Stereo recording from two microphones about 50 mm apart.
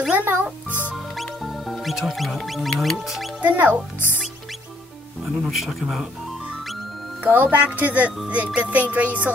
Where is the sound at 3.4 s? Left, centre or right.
Right.